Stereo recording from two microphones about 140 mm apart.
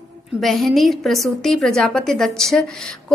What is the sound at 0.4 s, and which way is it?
A woman's voice, centre (ahead or behind).